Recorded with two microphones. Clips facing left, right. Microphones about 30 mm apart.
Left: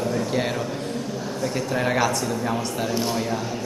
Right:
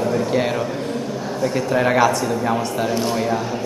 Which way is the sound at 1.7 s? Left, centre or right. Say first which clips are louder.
Right 6 dB; centre.